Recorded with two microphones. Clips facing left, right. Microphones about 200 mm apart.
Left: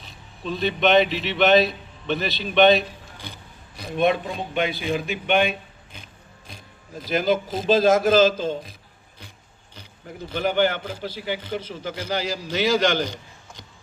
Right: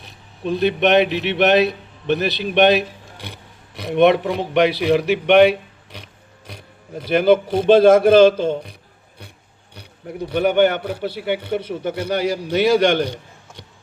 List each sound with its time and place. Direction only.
0.4 s a man's voice: 70° right (ahead or behind)
9.7 s a man's voice: 70° right (ahead or behind)